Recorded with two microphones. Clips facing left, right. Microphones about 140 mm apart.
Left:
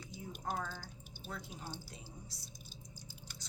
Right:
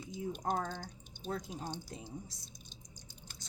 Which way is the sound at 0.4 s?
45° right (ahead or behind).